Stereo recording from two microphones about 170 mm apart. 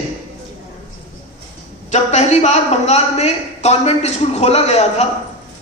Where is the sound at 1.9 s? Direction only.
40° left (ahead or behind).